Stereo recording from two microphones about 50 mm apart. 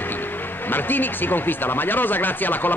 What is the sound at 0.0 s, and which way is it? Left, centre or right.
Speech, left.